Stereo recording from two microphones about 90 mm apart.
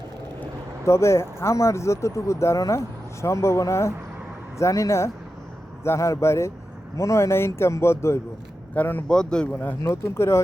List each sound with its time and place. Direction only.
0.9 s speech: 30° left (ahead or behind)
9.0 s speech: 10° left (ahead or behind)
9.6 s speech: 25° left (ahead or behind)